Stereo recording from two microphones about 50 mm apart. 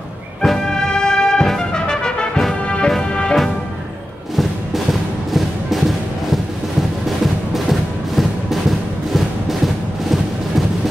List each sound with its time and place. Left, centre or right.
0.4 s brass instrument: centre
2.6 s music: left
5.3 s music: centre
8.2 s music: centre